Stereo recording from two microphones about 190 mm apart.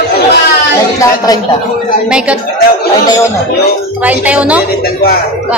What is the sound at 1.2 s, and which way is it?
Speech, 20° left (ahead or behind).